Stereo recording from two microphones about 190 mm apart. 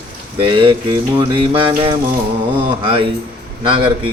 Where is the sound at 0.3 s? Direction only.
25° right (ahead or behind).